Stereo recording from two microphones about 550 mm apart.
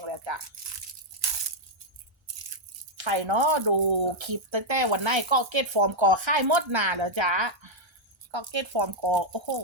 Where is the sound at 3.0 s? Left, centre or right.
Right.